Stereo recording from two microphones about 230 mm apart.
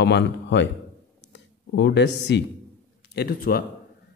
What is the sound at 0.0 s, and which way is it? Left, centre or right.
A man's voice, left.